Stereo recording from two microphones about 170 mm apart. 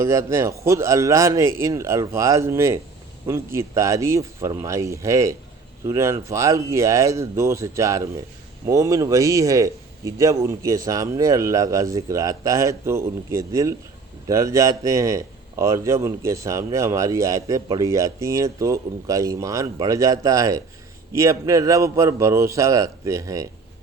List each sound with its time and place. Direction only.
0.0 s a man's voice: 15° right (ahead or behind)